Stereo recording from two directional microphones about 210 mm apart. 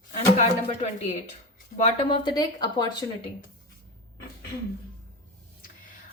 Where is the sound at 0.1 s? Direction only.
35° left (ahead or behind).